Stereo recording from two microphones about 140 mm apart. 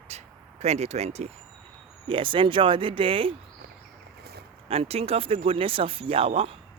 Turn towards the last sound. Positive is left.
turn(degrees=-45)  # may be behind; listen again after turning